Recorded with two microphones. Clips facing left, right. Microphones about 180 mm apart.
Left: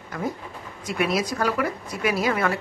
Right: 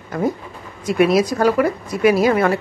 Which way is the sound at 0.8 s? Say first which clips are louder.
Right 9 dB; 70° right (ahead or behind).